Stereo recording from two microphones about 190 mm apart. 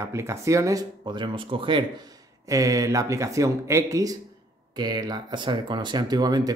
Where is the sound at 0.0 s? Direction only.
15° right (ahead or behind).